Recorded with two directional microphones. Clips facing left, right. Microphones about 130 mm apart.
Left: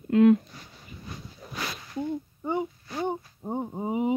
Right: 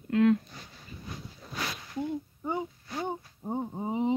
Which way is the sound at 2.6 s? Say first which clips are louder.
Left 4 dB; 10° left (ahead or behind).